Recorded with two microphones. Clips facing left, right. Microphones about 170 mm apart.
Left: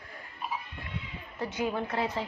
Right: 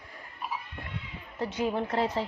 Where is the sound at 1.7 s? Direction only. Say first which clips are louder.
Right 3 dB; 35° right (ahead or behind).